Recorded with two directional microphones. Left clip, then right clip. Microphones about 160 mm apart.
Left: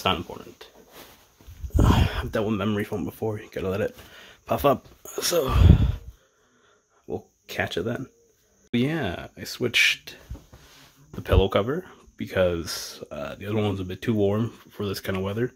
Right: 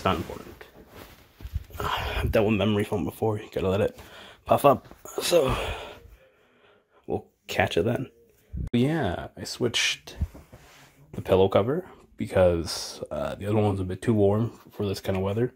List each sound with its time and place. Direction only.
0.0 s speech: 10° left (ahead or behind)
1.8 s a sound: 40° left (ahead or behind)
2.1 s speech: 5° right (ahead or behind)
7.4 s speech: 15° right (ahead or behind)
8.7 s speech: 5° right (ahead or behind)
11.1 s speech: centre (ahead or behind)
13.6 s speech: centre (ahead or behind)
14.3 s speech: 15° left (ahead or behind)